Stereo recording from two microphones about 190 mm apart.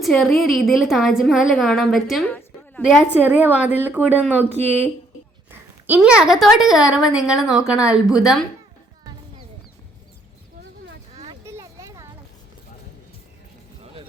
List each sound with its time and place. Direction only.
0.0 s a woman's voice: centre (ahead or behind)
5.5 s a woman's voice: 10° right (ahead or behind)
11.4 s a sound: 15° right (ahead or behind)